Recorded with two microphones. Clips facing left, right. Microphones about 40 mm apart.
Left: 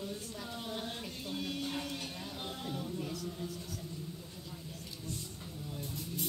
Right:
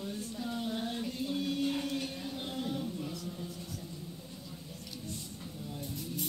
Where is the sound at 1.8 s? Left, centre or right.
Right.